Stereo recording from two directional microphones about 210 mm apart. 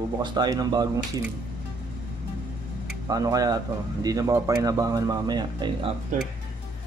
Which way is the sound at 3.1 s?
15° right (ahead or behind).